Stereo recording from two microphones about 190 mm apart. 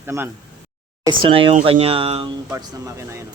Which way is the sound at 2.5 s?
15° right (ahead or behind).